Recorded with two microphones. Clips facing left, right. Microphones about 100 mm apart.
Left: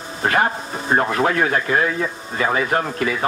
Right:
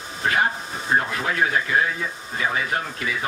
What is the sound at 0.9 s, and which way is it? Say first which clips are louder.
Speech: left 6 dB; 50° left (ahead or behind).